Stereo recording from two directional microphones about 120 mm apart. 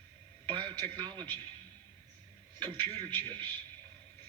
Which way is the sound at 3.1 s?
15° left (ahead or behind).